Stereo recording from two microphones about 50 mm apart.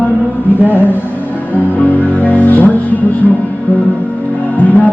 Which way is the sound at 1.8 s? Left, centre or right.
Left.